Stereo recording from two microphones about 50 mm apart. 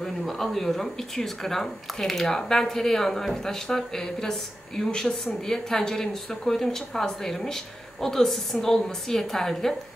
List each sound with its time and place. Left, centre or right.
0.0 s speech: centre